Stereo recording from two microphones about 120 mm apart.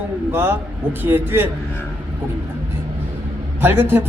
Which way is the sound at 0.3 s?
20° right (ahead or behind).